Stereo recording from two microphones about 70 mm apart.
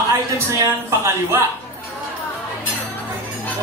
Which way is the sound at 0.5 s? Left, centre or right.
Right.